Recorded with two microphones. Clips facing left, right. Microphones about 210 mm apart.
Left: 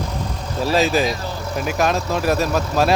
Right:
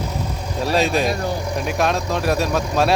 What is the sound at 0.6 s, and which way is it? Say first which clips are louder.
Speech: left 1 dB; centre (ahead or behind).